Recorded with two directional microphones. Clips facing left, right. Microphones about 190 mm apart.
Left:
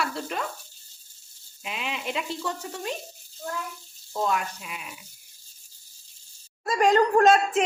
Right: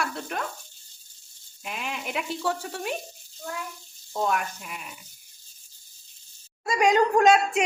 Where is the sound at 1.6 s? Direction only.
Centre (ahead or behind).